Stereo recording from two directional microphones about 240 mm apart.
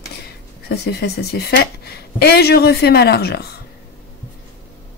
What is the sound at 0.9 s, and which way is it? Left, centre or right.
Speech, left.